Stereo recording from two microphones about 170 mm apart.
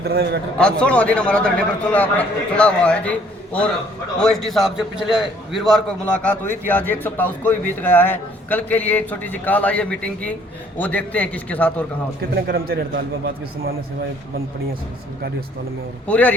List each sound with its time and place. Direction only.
0.0 s a man's voice: 70° right (ahead or behind)
0.6 s a man's voice: 5° left (ahead or behind)
6.7 s a man's voice: 10° left (ahead or behind)
12.3 s a man's voice: 60° right (ahead or behind)
16.0 s a man's voice: 10° left (ahead or behind)